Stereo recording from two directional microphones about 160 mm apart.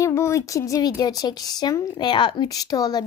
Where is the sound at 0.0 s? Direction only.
15° left (ahead or behind).